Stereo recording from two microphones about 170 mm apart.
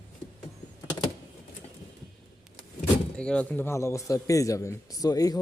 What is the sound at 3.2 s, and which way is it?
Speech, 5° left (ahead or behind).